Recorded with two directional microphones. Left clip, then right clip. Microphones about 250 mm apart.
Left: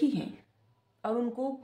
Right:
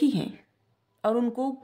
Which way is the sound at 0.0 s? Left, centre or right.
Right.